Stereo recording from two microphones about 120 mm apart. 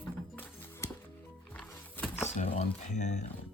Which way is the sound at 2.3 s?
75° left (ahead or behind).